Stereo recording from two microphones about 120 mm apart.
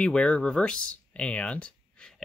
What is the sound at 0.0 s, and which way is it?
Speech, 5° left (ahead or behind).